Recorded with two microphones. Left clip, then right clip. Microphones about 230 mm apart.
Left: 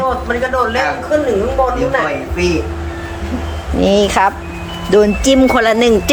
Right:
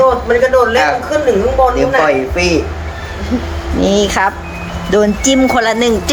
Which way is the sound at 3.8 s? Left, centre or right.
Centre.